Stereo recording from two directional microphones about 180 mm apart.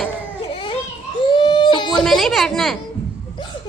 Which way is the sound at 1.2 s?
25° left (ahead or behind).